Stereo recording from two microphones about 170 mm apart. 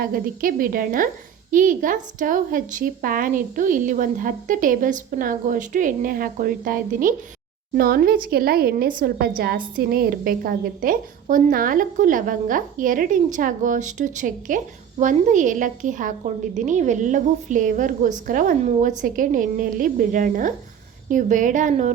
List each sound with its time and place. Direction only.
0.0 s a woman's voice: 55° right (ahead or behind)